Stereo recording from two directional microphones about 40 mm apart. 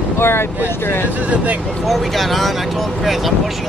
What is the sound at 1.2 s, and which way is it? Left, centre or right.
Speech, right.